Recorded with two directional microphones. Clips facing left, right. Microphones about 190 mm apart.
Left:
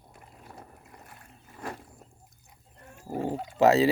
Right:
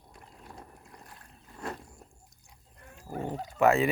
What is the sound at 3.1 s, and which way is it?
Dog, 25° left (ahead or behind).